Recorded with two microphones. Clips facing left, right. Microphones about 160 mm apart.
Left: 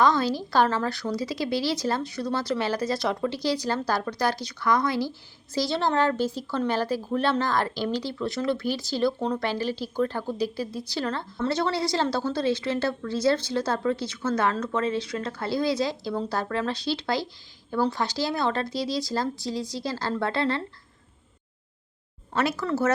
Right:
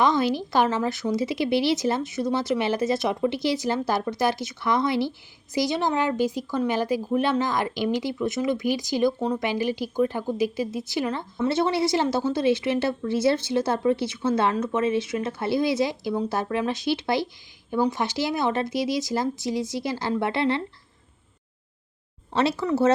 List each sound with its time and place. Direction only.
0.0 s a woman's voice: 20° right (ahead or behind)
22.3 s speech: 25° right (ahead or behind)